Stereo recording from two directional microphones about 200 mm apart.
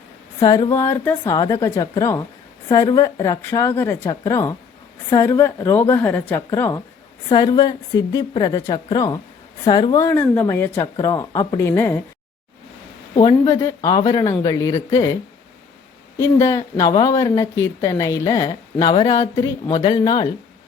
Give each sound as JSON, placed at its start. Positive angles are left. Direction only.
{"t": 0.4, "sound": "a woman's voice", "side_deg": 20}
{"t": 13.1, "sound": "speech", "side_deg": 20}
{"t": 16.1, "sound": "speech", "side_deg": 15}